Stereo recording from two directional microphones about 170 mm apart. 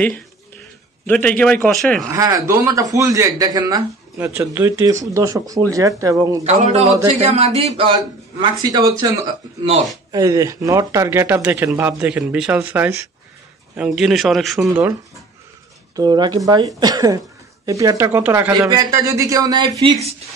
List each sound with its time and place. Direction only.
1.0 s a man's voice: 10° left (ahead or behind)
2.0 s a man's voice: 20° right (ahead or behind)
6.4 s a man's voice: 40° right (ahead or behind); by 8.9 s 25° right (ahead or behind)
10.1 s a man's voice: 20° right (ahead or behind); by 14.7 s centre (ahead or behind)
16.0 s a man's voice: 25° right (ahead or behind)
18.5 s a man's voice: 25° right (ahead or behind)